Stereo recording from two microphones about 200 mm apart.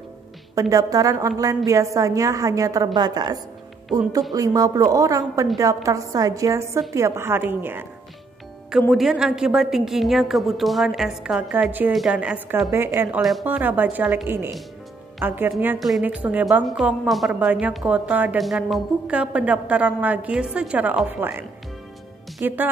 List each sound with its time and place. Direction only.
0.6 s a woman's voice: 15° right (ahead or behind)
8.9 s a woman's voice: centre (ahead or behind)